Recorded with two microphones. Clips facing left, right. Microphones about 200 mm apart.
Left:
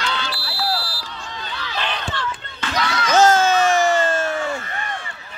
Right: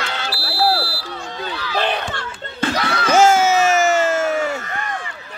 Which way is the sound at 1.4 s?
55° right (ahead or behind).